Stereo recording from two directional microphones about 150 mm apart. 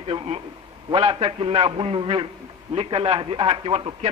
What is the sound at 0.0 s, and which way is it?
A man's voice, 40° right (ahead or behind).